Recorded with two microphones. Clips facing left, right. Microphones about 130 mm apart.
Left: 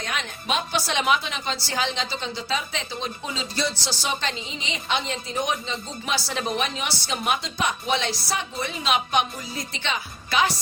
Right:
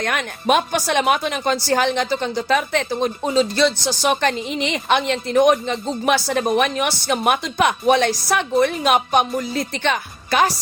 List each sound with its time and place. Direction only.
0.0 s speech: 60° right (ahead or behind)
3.6 s a woman's voice: 60° right (ahead or behind)